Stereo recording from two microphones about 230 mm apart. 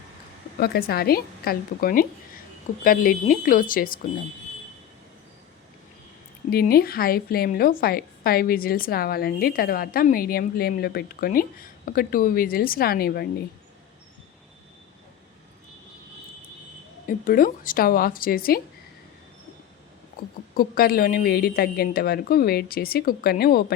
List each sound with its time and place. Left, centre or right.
0.6 s a woman's voice: left
6.5 s a woman's voice: left
17.1 s a woman's voice: left
20.6 s a woman's voice: left